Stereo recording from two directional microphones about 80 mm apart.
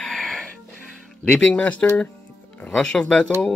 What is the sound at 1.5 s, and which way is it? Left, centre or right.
Speech, centre.